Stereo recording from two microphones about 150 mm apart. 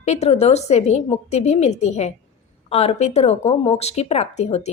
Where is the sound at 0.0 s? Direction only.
45° left (ahead or behind).